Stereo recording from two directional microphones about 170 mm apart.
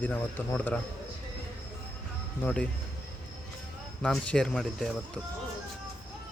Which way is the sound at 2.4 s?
5° left (ahead or behind).